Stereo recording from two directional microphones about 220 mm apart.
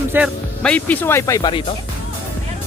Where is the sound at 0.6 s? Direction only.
5° left (ahead or behind); by 1.7 s 25° left (ahead or behind).